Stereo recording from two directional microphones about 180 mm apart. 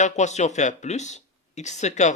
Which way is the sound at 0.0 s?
40° left (ahead or behind).